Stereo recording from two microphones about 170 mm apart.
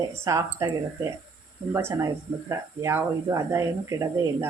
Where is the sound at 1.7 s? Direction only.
15° right (ahead or behind).